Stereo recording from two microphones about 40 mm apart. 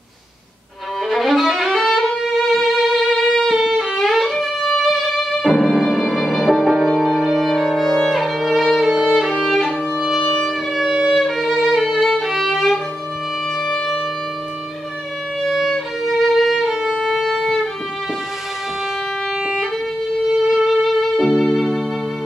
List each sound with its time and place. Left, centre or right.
1.1 s violin: centre
2.0 s violin: centre
2.7 s music: centre
8.7 s violin: centre
9.9 s music: centre
11.1 s music: centre
12.2 s violin: centre
13.7 s music: centre
15.4 s violin: centre
16.1 s music: centre
20.4 s music: centre